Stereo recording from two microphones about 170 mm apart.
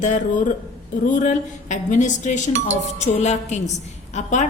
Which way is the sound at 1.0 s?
50° left (ahead or behind).